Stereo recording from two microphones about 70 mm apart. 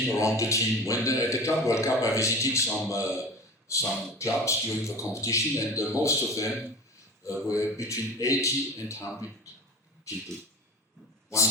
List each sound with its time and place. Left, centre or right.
0.2 s a man's voice: left